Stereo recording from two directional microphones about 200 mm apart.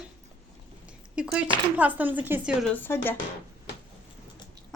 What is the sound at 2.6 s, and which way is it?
Speech, 10° left (ahead or behind).